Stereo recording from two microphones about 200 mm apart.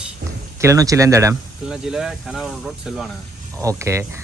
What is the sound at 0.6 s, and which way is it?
Speech, 15° right (ahead or behind).